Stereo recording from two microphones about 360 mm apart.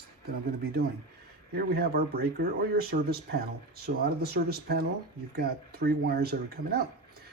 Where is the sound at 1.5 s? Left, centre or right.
Right.